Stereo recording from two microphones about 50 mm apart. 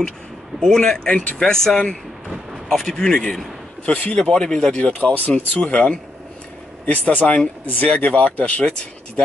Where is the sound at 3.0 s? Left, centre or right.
Centre.